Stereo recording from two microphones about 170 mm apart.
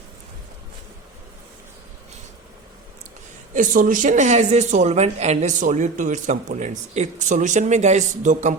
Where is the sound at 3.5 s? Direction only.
50° right (ahead or behind).